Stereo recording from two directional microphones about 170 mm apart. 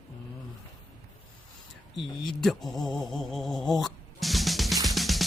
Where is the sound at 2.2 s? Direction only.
Centre (ahead or behind).